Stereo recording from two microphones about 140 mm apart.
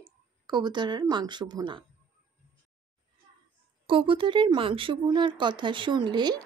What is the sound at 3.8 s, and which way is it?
Speech, 35° right (ahead or behind).